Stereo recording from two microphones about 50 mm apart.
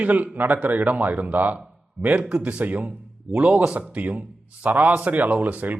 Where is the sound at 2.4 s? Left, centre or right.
Right.